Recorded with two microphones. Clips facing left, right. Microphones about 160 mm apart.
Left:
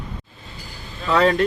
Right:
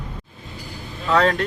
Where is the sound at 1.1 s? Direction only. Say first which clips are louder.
Left 1 dB; 10° left (ahead or behind).